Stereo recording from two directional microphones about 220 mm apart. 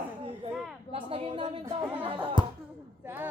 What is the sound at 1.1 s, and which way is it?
Speech, 25° right (ahead or behind).